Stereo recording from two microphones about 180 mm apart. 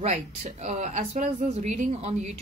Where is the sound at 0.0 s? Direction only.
40° right (ahead or behind).